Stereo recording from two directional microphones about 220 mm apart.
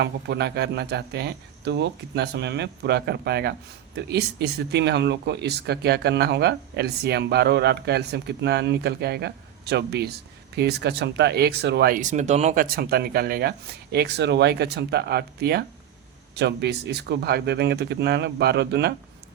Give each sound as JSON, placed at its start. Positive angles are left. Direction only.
{"t": 0.0, "sound": "speech", "side_deg": -50}